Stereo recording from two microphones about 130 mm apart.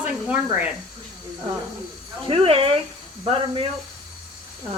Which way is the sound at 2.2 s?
45° right (ahead or behind).